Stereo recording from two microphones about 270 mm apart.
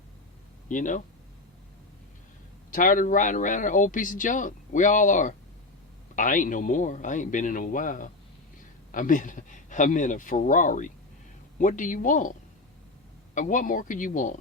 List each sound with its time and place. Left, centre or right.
0.7 s speech: left
2.6 s speech: left
13.3 s speech: left